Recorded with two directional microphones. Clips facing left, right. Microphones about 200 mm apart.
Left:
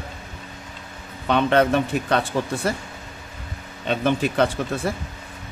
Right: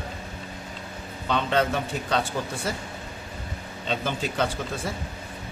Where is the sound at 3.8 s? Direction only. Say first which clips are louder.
Left 7 dB; 60° left (ahead or behind).